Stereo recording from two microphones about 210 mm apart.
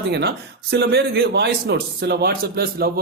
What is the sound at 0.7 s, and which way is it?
Speech, 50° right (ahead or behind).